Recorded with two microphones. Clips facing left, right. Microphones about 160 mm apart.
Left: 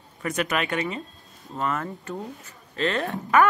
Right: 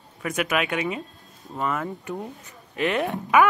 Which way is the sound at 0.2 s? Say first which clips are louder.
Right 1 dB; 5° right (ahead or behind).